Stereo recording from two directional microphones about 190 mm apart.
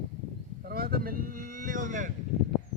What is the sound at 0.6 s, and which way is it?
Speech, 50° right (ahead or behind).